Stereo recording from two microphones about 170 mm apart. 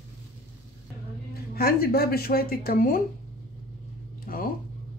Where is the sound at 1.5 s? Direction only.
65° left (ahead or behind).